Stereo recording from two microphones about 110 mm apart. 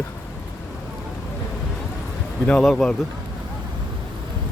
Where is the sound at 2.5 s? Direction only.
5° left (ahead or behind).